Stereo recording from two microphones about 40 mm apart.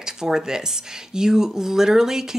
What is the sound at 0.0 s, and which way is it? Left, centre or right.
Speech, centre.